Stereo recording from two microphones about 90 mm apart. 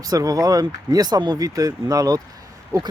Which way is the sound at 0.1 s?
45° right (ahead or behind).